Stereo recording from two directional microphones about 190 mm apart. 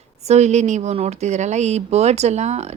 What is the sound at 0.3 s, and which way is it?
Speech, 35° right (ahead or behind).